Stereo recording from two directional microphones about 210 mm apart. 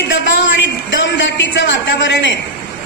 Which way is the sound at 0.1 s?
60° left (ahead or behind).